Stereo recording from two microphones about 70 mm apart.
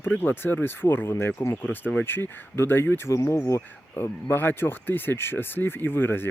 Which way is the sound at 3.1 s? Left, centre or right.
Left.